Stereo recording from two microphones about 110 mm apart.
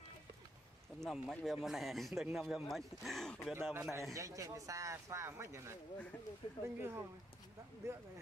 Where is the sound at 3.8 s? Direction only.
25° right (ahead or behind).